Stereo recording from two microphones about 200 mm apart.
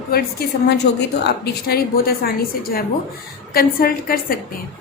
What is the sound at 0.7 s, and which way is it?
A woman's voice, 60° left (ahead or behind).